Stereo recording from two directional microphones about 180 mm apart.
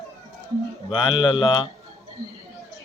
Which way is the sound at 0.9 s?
25° left (ahead or behind).